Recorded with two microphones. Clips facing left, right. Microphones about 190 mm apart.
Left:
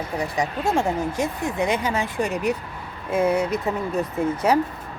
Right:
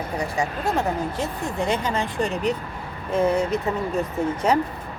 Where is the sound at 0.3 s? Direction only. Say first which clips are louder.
Left 2 dB; 10° left (ahead or behind).